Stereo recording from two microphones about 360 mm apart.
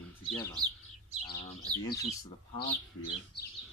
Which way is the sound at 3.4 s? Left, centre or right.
Left.